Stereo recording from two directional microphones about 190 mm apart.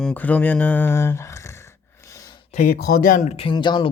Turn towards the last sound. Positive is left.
turn(degrees=25)  # may be behind; listen again after turning